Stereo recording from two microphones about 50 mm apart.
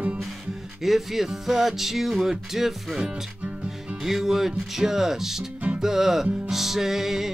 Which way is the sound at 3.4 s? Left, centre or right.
Right.